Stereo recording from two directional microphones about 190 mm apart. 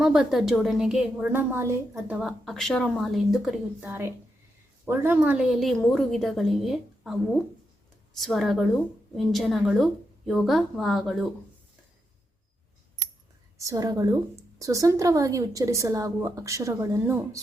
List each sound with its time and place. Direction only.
0.0 s a woman's voice: centre (ahead or behind)
2.1 s a woman's voice: centre (ahead or behind)
13.6 s a woman's voice: 15° right (ahead or behind)